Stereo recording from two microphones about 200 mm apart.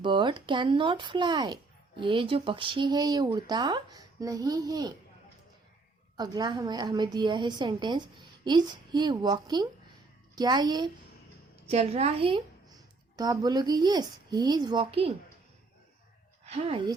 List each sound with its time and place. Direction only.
0.0 s speech: 25° right (ahead or behind)
6.1 s speech: 20° right (ahead or behind)
11.7 s a woman's voice: 30° right (ahead or behind)
16.5 s speech: 30° right (ahead or behind)